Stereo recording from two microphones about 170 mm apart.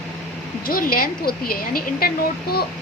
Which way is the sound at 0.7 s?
55° left (ahead or behind).